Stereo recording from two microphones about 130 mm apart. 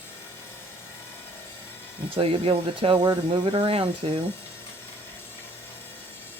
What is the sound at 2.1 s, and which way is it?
Speech, 45° right (ahead or behind).